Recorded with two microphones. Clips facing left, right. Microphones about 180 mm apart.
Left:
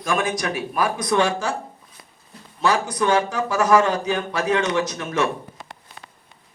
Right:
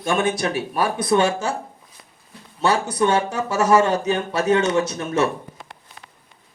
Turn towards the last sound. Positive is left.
turn(degrees=-30)  # may be behind; listen again after turning